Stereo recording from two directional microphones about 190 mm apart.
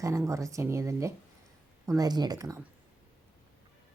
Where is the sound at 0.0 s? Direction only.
15° right (ahead or behind).